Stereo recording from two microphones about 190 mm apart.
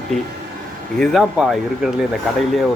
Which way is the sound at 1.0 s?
Centre (ahead or behind).